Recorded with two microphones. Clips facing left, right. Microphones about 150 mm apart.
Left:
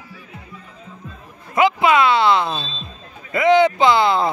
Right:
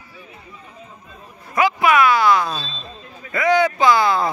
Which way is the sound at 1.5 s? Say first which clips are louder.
Left 1 dB; 25° left (ahead or behind).